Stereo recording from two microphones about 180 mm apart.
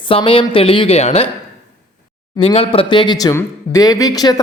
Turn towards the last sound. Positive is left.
turn(degrees=20)  # may be behind; listen again after turning